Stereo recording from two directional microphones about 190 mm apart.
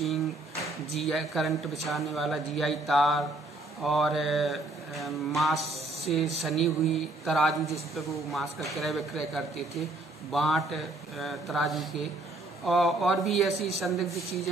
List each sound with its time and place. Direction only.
0.0 s a sound: centre (ahead or behind)
1.0 s a man's voice: centre (ahead or behind)
5.6 s speech: 35° right (ahead or behind)
6.4 s a man's voice: centre (ahead or behind)
13.5 s speech: 35° right (ahead or behind)
13.7 s a man's voice: centre (ahead or behind)